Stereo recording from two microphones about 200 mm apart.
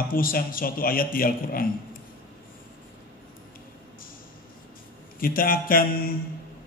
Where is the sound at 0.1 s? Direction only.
45° left (ahead or behind).